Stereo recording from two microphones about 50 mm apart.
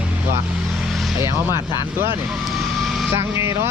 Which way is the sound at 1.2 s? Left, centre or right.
Right.